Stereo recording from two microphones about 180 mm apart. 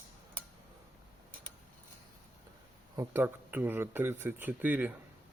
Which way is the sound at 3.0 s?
10° right (ahead or behind).